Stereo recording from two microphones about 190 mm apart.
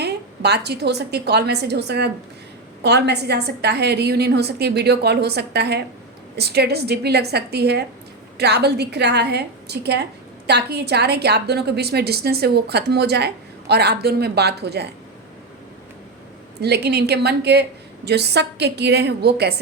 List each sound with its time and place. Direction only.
0.0 s a woman's voice: 60° right (ahead or behind)
16.6 s a woman's voice: 60° right (ahead or behind)